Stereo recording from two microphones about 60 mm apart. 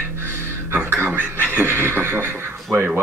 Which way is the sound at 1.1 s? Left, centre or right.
Right.